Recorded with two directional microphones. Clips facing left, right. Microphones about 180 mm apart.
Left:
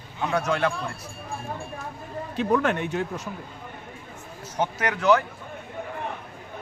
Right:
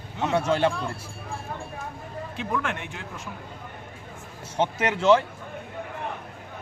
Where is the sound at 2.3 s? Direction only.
40° left (ahead or behind).